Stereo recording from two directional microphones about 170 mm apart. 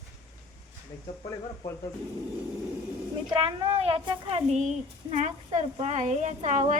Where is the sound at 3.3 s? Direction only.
35° right (ahead or behind).